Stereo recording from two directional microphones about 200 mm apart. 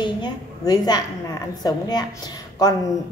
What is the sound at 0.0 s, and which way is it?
A woman's voice, 20° left (ahead or behind).